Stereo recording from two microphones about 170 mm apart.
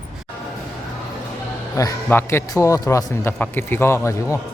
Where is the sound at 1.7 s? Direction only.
20° left (ahead or behind).